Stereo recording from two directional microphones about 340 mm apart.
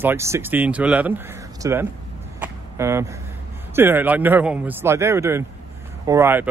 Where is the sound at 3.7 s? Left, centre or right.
Centre.